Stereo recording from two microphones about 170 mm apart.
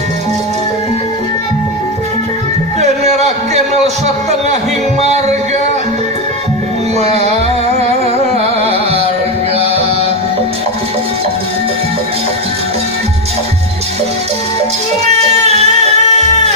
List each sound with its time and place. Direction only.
2.8 s a sound: 40° right (ahead or behind)
4.0 s a man's voice: 40° right (ahead or behind)
4.9 s music: 40° right (ahead or behind)
7.0 s music: 40° right (ahead or behind)
7.8 s carnatic music: 35° right (ahead or behind)
15.0 s music: 40° right (ahead or behind)